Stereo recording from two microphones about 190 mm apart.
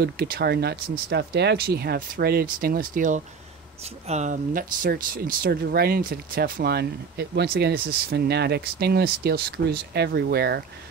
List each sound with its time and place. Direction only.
0.0 s speech: 55° right (ahead or behind)